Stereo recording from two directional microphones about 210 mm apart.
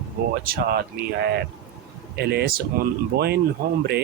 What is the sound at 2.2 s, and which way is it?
Speech, 50° right (ahead or behind).